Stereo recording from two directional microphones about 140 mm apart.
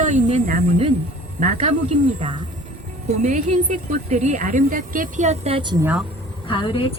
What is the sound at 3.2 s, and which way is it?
A woman's voice, 60° right (ahead or behind).